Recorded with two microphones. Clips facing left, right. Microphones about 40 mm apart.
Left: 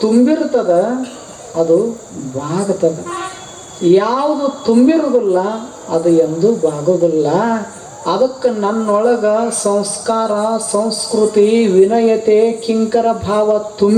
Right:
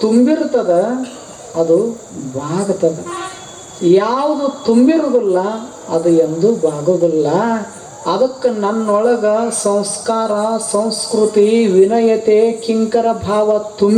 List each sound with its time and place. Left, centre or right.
0.0 s speech: centre
10.1 s speech: centre
10.7 s speech: centre